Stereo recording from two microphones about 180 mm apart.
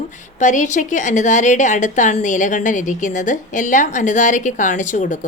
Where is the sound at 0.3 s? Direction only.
45° left (ahead or behind).